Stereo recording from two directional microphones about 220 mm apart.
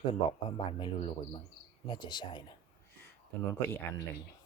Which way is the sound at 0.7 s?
20° left (ahead or behind).